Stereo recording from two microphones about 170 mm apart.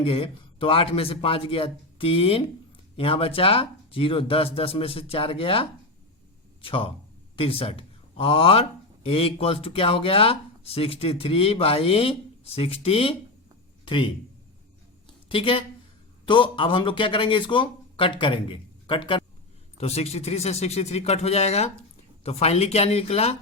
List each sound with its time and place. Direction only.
0.0 s a man's voice: 30° left (ahead or behind)
15.3 s speech: 30° left (ahead or behind)